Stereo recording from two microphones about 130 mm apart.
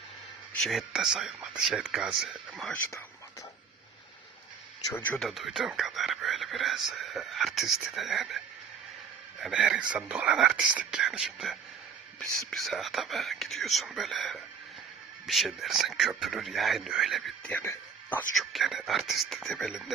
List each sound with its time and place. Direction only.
0.6 s speech: centre (ahead or behind)
2.7 s speech: 15° left (ahead or behind)
4.9 s speech: 15° left (ahead or behind)
5.2 s speech: centre (ahead or behind)
9.4 s speech: 5° right (ahead or behind)
17.5 s speech: 15° left (ahead or behind)
18.3 s speech: centre (ahead or behind)